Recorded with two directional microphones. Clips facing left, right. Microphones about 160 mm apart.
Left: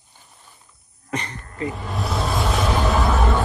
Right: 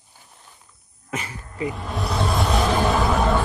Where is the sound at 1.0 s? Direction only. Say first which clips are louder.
Left 2 dB; 5° right (ahead or behind).